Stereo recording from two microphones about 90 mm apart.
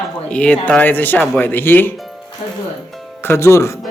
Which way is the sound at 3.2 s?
30° left (ahead or behind).